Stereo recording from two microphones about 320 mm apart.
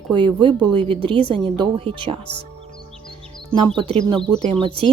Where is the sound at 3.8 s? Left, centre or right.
Centre.